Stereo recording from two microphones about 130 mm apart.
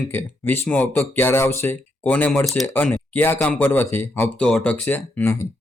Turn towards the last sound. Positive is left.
turn(degrees=15)  # may be behind; listen again after turning